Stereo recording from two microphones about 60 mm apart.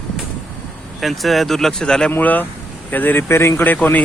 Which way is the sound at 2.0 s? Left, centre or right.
Left.